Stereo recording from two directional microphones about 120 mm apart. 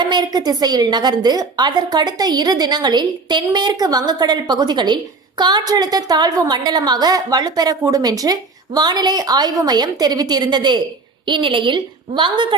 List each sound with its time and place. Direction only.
0.0 s a woman's voice: 35° right (ahead or behind)